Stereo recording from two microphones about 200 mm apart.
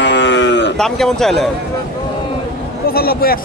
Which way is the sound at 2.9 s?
50° left (ahead or behind).